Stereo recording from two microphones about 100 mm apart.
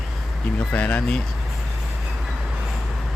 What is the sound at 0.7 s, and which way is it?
Speech, 15° left (ahead or behind).